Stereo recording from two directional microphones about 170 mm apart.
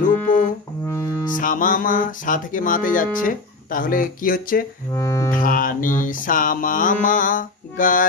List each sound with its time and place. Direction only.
0.3 s music: 55° left (ahead or behind)
0.8 s music: 15° left (ahead or behind)
1.3 s music: 50° left (ahead or behind)
4.9 s music: 20° left (ahead or behind)
5.3 s music: 55° left (ahead or behind)